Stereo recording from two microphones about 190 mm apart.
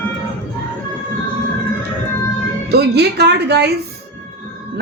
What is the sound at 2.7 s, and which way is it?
Speech, 60° right (ahead or behind).